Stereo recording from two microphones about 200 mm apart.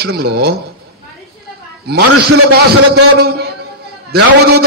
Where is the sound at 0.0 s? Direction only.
55° right (ahead or behind).